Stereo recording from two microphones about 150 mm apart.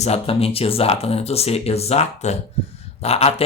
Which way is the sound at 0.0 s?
40° left (ahead or behind).